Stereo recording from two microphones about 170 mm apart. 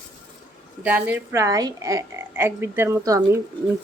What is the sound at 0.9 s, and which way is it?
Speech, 10° right (ahead or behind).